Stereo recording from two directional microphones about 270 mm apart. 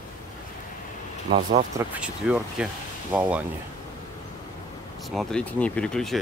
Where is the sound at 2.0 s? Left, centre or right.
Centre.